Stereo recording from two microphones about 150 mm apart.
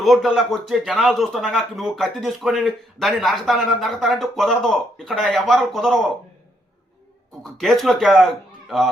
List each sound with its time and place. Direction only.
0.0 s speech: centre (ahead or behind)
7.6 s speech: centre (ahead or behind)